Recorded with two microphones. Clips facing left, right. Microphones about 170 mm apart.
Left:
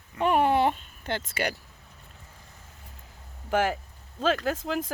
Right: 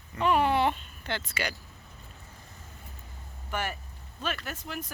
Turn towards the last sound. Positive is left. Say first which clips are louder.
# left 10 dB
turn(degrees=90)